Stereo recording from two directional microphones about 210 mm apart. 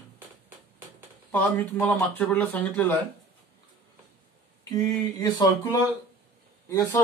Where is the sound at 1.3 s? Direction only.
10° left (ahead or behind).